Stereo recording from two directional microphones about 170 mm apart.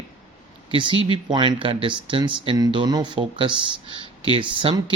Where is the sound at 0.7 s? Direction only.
30° right (ahead or behind).